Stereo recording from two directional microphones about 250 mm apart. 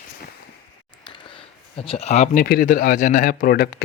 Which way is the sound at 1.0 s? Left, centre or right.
Centre.